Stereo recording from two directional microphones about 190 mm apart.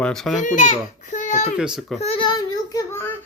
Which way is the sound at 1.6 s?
Centre (ahead or behind).